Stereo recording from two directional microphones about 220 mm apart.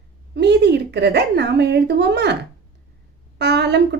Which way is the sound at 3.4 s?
50° right (ahead or behind).